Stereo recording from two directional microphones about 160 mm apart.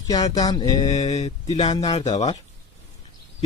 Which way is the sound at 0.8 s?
45° left (ahead or behind).